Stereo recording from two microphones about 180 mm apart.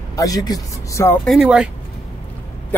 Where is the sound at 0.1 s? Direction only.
20° left (ahead or behind).